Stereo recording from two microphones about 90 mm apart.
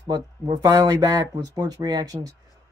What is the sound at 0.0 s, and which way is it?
Speech, 45° right (ahead or behind).